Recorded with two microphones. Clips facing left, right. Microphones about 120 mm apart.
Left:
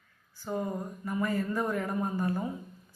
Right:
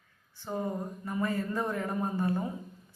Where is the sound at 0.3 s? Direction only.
25° right (ahead or behind).